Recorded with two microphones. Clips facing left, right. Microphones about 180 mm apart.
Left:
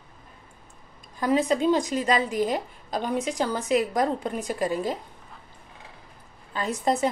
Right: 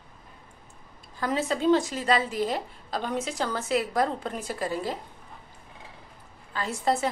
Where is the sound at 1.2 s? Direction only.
15° left (ahead or behind).